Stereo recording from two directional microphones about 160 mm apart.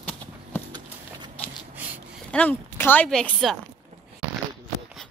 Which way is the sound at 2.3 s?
10° left (ahead or behind).